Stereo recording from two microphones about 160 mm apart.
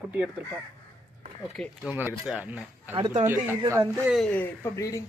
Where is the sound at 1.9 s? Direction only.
10° right (ahead or behind).